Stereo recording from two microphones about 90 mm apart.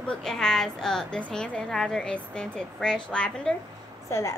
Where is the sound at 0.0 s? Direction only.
10° left (ahead or behind).